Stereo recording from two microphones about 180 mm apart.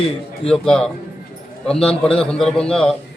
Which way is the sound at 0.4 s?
5° left (ahead or behind).